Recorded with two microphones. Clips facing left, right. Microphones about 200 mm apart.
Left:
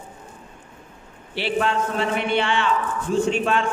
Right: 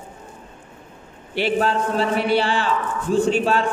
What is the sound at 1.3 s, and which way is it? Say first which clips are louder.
A man's voice: right 3 dB; 40° right (ahead or behind).